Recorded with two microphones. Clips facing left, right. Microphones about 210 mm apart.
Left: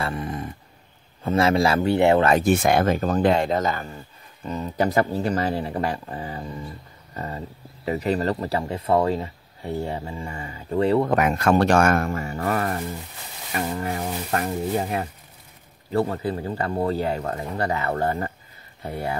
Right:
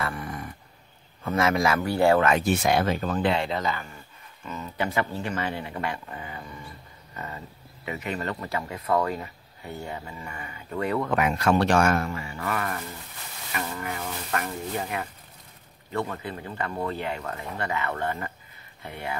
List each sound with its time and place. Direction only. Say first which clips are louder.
0.0 s dog: left 4 dB; 25° left (ahead or behind)
1.2 s a man's voice: left 4 dB; 30° left (ahead or behind)
2.2 s speech: left 4 dB; 45° left (ahead or behind)
11.1 s speech: left 3 dB; 50° left (ahead or behind)